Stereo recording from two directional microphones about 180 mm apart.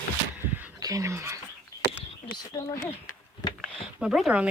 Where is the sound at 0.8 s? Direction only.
20° right (ahead or behind).